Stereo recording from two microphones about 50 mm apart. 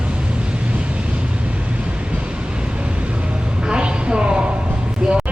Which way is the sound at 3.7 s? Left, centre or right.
Centre.